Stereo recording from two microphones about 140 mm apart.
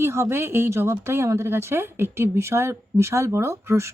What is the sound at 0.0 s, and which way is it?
Speech, 20° right (ahead or behind).